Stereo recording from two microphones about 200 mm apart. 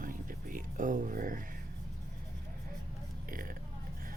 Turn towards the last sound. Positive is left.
turn(degrees=-45)  # may be behind; listen again after turning